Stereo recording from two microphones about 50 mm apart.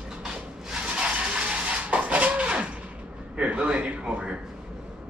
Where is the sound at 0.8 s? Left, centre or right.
Centre.